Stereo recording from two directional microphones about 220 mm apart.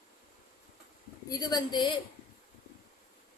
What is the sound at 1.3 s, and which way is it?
Speech, 20° left (ahead or behind).